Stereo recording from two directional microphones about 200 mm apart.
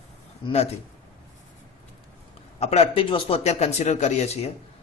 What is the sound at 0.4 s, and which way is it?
Speech, 30° left (ahead or behind).